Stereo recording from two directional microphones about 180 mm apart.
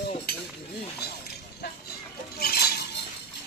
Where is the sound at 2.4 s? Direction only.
60° left (ahead or behind).